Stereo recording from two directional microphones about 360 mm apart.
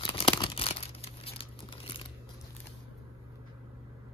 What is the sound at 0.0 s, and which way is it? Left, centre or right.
Crumpling, centre.